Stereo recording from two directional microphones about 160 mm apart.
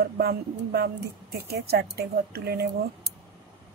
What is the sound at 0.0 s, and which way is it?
Speech, 80° right.